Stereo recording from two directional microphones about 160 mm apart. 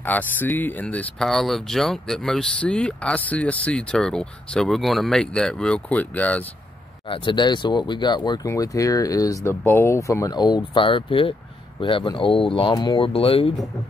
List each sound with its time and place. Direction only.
0.0 s speech: 10° left (ahead or behind)
7.1 s speech: 30° left (ahead or behind)